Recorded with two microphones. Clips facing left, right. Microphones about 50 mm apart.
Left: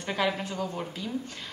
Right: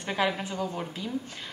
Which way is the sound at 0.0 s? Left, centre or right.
Centre.